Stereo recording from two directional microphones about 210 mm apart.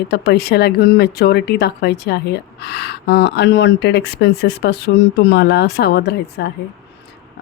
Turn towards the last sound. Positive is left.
turn(degrees=50)  # may be behind; listen again after turning